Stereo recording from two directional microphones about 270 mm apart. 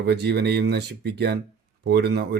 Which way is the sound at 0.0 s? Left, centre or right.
Right.